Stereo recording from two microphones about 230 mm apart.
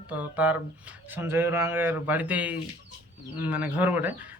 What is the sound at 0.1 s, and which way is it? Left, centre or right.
Speech, centre.